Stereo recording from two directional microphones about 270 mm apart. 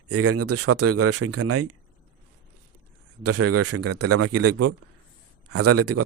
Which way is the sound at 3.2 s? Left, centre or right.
Right.